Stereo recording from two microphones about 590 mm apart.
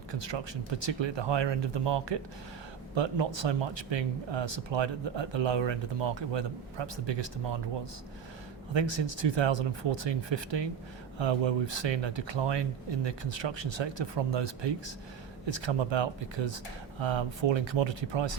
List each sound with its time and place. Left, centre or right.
0.1 s speech: right
8.7 s speech: right